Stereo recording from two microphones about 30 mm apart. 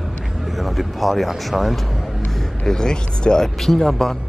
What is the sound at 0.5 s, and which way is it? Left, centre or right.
Speech, centre.